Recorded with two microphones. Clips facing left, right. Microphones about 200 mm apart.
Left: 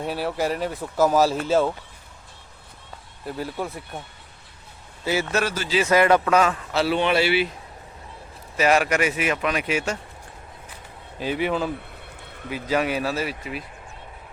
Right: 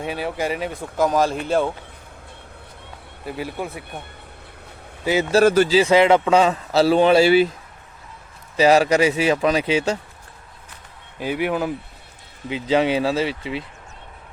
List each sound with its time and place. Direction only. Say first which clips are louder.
0.0 s speech: even; centre (ahead or behind)
3.2 s speech: right 1 dB; 10° right (ahead or behind)
5.6 s a man's voice: right 4 dB; 30° right (ahead or behind)
8.5 s a man's voice: right 5 dB; 30° right (ahead or behind)
11.2 s speech: right 2 dB; 10° right (ahead or behind)
12.5 s speech: right 5 dB; 25° right (ahead or behind)